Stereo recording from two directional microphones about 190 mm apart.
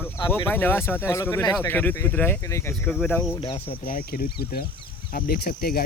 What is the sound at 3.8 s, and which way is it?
Speech, 50° left (ahead or behind).